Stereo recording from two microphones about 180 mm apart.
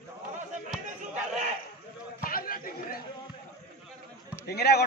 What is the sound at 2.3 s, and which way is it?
Chatter, 55° left (ahead or behind).